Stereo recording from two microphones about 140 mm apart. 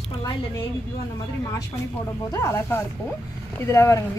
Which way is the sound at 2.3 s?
20° left (ahead or behind).